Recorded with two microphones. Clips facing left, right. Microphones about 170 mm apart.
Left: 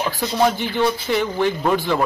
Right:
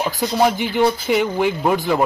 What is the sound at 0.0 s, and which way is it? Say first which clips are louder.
Speech: right 1 dB; 15° right (ahead or behind).